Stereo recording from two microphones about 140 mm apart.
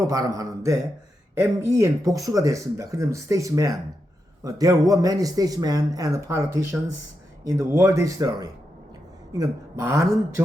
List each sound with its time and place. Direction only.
0.0 s a man's voice: 25° right (ahead or behind)